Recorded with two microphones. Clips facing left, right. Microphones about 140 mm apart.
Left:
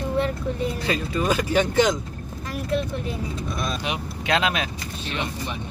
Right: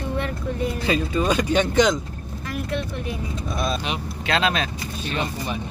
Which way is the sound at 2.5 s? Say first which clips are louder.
Left 2 dB; 35° left (ahead or behind).